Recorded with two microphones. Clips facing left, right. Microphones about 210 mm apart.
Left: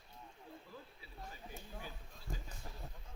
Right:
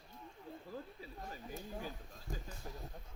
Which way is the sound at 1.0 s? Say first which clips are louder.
Right 4 dB; 45° right (ahead or behind).